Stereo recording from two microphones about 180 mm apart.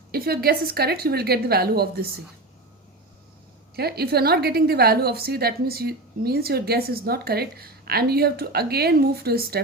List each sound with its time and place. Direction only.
0.1 s a woman's voice: 60° right (ahead or behind)
3.8 s a woman's voice: 60° right (ahead or behind)